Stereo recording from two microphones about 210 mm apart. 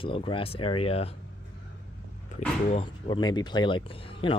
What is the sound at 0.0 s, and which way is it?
Speech, 25° left (ahead or behind).